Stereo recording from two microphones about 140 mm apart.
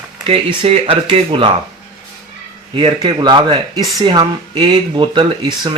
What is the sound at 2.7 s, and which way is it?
Speech, 40° right (ahead or behind).